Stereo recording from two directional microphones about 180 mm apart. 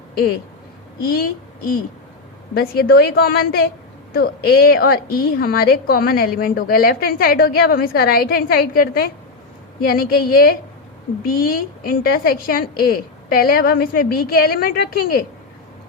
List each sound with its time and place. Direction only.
2.6 s a woman's voice: 60° left (ahead or behind)